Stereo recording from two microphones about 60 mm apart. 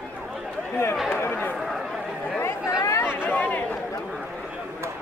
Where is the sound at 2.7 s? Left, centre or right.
Left.